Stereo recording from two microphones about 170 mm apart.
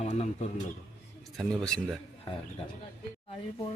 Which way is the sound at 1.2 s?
Centre (ahead or behind).